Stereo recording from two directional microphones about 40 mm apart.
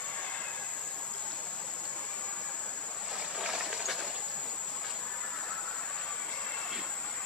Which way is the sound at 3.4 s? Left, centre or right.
Centre.